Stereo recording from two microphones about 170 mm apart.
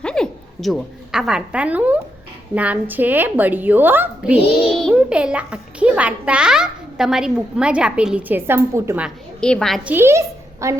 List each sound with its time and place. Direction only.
0.0 s a woman's voice: 5° left (ahead or behind)
4.4 s a child's voice: 35° left (ahead or behind)
4.9 s a child's voice: 5° right (ahead or behind)
9.0 s a woman's voice: 5° left (ahead or behind)
9.9 s a woman's voice: 15° right (ahead or behind)